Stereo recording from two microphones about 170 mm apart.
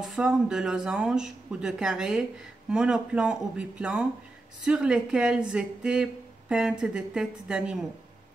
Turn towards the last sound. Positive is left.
turn(degrees=-5)  # may be behind; listen again after turning